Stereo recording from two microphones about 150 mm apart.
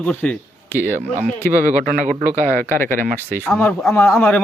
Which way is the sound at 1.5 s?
60° right (ahead or behind).